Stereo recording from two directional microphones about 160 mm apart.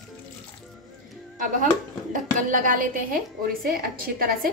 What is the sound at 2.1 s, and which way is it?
A woman's voice, 55° right (ahead or behind).